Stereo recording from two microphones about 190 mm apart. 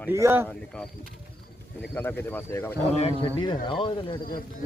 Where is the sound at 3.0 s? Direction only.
30° left (ahead or behind).